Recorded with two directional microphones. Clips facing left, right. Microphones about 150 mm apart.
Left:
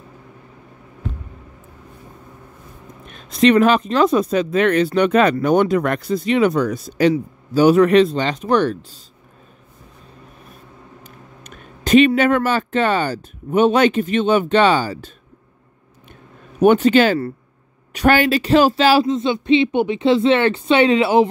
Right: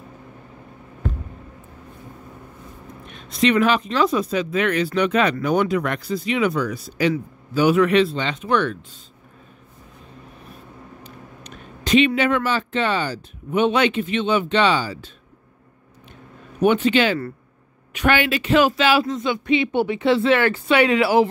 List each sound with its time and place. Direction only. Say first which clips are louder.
3.3 s a man's voice: left 5 dB; 40° left (ahead or behind)
11.1 s a sound: right 1 dB; 50° left (ahead or behind)
12.1 s speech: left 4 dB; 45° left (ahead or behind)
16.5 s speech: left 5 dB; 45° left (ahead or behind); by 21.3 s 20° left (ahead or behind)